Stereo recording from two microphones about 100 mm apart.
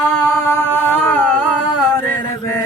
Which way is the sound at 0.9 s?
15° left (ahead or behind).